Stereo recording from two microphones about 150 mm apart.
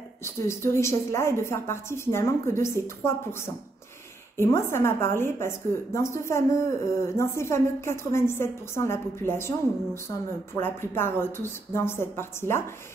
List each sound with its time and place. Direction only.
0.2 s a woman's voice: 15° left (ahead or behind)